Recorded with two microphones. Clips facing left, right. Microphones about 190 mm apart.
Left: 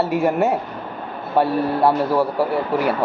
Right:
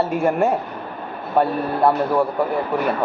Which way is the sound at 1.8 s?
5° left (ahead or behind).